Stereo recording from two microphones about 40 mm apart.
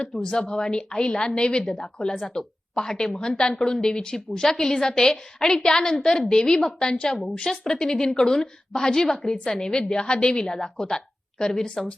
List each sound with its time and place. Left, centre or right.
0.0 s a woman's voice: centre